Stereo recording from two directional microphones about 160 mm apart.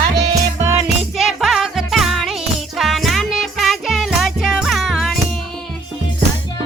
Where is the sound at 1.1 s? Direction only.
Centre (ahead or behind).